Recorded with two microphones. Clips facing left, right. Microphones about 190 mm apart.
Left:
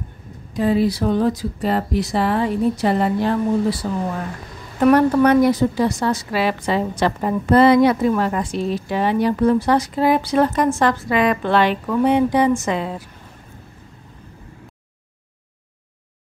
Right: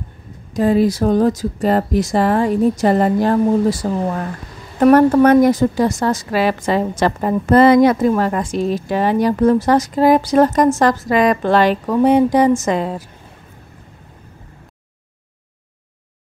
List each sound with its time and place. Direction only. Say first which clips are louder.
0.6 s a woman's voice: right 3 dB; 45° right (ahead or behind)